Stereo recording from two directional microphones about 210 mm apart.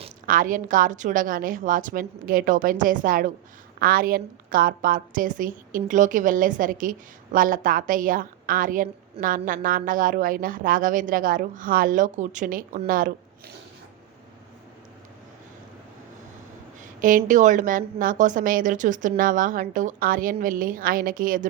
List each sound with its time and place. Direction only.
0.3 s a woman's voice: 40° right (ahead or behind)
16.8 s a woman's voice: 40° right (ahead or behind)